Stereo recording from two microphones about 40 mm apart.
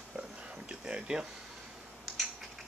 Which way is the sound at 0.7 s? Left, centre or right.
Right.